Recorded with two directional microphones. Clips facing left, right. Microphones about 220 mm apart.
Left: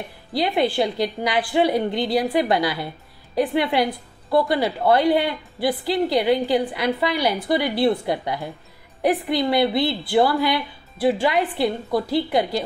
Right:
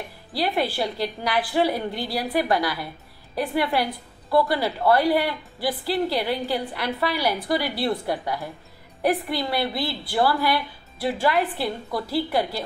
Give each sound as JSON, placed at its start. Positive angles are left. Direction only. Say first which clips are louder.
{"t": 0.3, "sound": "a woman's voice", "louder": "left 4 dB", "side_deg": 20}